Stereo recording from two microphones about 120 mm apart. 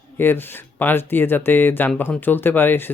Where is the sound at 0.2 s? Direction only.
20° left (ahead or behind).